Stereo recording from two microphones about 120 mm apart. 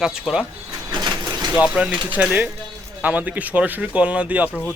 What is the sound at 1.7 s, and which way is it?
Speech, 10° right (ahead or behind).